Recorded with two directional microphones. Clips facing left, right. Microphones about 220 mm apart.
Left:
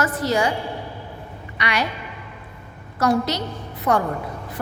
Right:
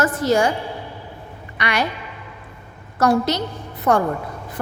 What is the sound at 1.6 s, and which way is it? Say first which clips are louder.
Speech: right 2 dB; 45° right (ahead or behind).